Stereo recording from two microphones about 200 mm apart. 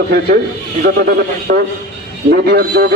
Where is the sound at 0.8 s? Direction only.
50° right (ahead or behind).